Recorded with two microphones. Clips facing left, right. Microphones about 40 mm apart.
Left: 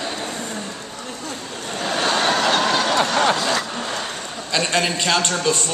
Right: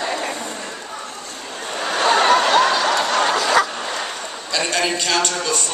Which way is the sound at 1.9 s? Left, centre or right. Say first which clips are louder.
Right 4 dB; right.